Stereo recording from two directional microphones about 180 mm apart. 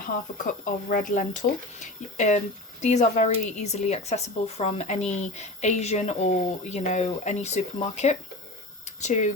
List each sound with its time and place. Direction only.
0.0 s speech: 50° left (ahead or behind)